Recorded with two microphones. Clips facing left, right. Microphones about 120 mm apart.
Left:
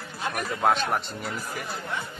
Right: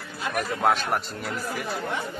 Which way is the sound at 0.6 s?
Centre (ahead or behind).